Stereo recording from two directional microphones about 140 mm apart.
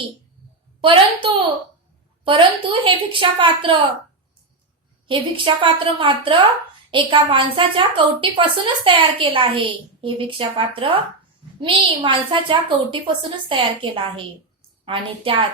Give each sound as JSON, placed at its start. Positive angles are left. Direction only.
{"t": 0.8, "sound": "a woman's voice", "side_deg": -35}
{"t": 5.0, "sound": "a woman's voice", "side_deg": -35}